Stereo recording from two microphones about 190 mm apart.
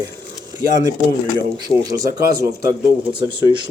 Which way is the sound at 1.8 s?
20° right (ahead or behind).